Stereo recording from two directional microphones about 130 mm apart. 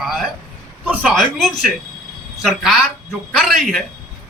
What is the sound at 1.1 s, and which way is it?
A man's voice, 5° left (ahead or behind).